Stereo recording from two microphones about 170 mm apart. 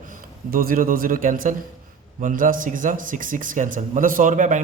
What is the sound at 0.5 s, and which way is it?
A man's voice, 55° right (ahead or behind).